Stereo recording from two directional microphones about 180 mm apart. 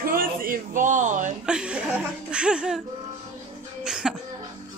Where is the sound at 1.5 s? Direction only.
5° right (ahead or behind).